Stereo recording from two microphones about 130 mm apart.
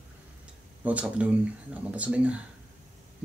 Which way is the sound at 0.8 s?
10° right (ahead or behind).